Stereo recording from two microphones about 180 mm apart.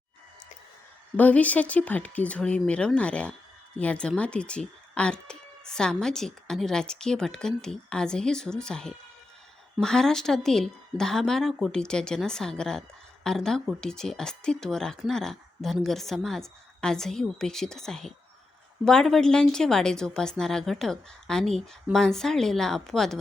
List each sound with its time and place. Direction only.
1.1 s speech: 10° left (ahead or behind)